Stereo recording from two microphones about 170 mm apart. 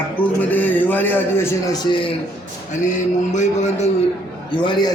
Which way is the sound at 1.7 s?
30° left (ahead or behind).